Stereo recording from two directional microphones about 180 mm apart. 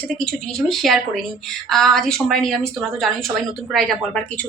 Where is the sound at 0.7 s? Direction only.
Centre (ahead or behind).